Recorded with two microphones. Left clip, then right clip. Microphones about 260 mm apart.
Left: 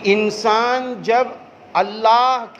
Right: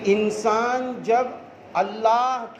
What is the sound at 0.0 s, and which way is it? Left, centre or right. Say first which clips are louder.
Speech: left 4 dB; left.